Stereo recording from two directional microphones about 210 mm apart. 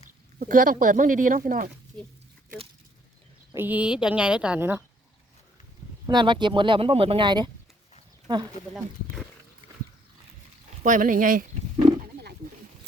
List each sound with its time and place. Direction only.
0.3 s speech: 40° right (ahead or behind)
3.5 s a woman's voice: 10° right (ahead or behind)
6.1 s speech: 20° right (ahead or behind)
10.8 s speech: 40° right (ahead or behind)